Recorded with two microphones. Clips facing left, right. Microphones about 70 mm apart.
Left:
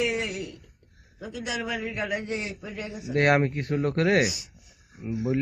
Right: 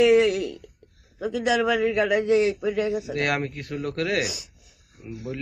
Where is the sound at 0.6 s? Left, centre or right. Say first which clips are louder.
Right 10 dB; right.